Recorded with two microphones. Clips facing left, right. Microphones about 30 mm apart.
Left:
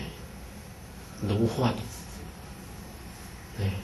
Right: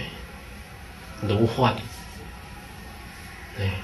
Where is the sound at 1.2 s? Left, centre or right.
Right.